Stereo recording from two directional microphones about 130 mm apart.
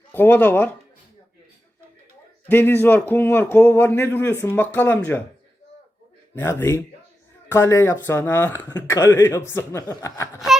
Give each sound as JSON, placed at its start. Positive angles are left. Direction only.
{"t": 0.1, "sound": "speech", "side_deg": 15}
{"t": 2.5, "sound": "speech", "side_deg": 15}
{"t": 6.3, "sound": "speech", "side_deg": 15}